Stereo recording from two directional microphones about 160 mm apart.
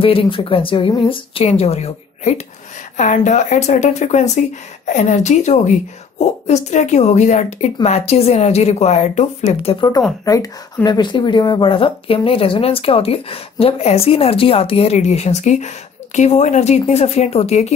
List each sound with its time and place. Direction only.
0.0 s speech: 35° left (ahead or behind)
10.2 s speech: 20° left (ahead or behind); by 17.7 s 45° left (ahead or behind)